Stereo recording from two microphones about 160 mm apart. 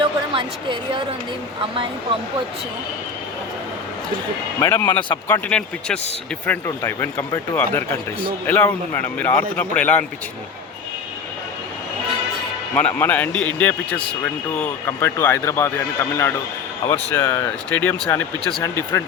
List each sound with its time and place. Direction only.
0.0 s a woman's voice: 30° right (ahead or behind)
4.6 s speech: 15° left (ahead or behind)
12.7 s speech: 10° left (ahead or behind)